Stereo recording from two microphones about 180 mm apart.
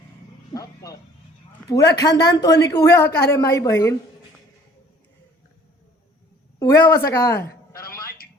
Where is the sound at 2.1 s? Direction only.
70° left (ahead or behind).